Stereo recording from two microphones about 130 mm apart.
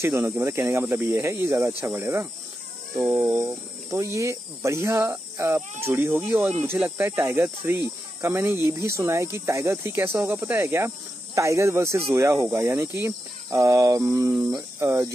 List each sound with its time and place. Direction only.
0.0 s speech: 20° right (ahead or behind)